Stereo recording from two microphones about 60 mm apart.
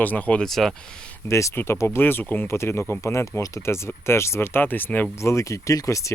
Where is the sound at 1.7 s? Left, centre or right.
Left.